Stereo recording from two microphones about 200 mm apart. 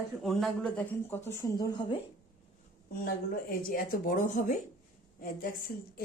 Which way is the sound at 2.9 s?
45° left (ahead or behind).